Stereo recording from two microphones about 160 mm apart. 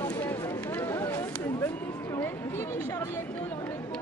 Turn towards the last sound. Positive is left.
turn(degrees=20)  # may be behind; listen again after turning